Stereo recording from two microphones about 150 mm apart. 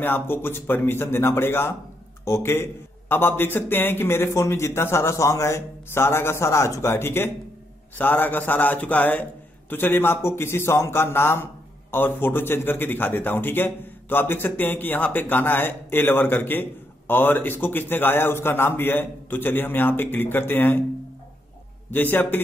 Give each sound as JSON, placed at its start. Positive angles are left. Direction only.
{"t": 0.0, "sound": "a man's voice", "side_deg": 15}
{"t": 21.9, "sound": "a man's voice", "side_deg": 10}